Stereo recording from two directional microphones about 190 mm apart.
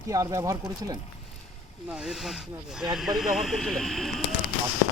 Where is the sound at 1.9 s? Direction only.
5° right (ahead or behind).